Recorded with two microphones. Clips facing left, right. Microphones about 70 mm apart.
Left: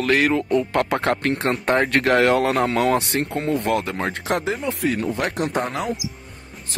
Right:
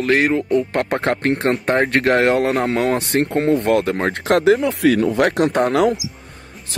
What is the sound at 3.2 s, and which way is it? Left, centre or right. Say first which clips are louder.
Speech: right 6 dB; right.